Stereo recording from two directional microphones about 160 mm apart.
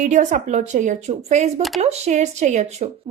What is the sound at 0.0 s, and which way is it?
A woman's voice, 50° right (ahead or behind).